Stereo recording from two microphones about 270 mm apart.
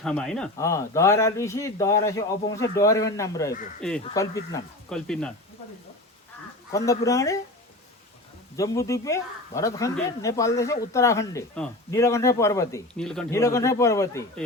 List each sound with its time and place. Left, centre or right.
0.0 s speech: centre
6.7 s speech: centre
8.5 s speech: centre